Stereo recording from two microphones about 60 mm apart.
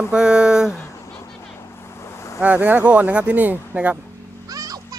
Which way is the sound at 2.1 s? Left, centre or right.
Left.